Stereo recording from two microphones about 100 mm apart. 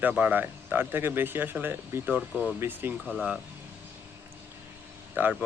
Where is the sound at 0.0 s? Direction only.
15° right (ahead or behind).